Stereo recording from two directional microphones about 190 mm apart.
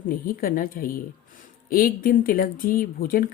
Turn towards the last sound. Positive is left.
turn(degrees=50)  # may be behind; listen again after turning